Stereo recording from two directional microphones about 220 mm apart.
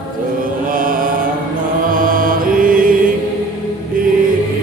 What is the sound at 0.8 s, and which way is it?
Mantra, 40° right (ahead or behind).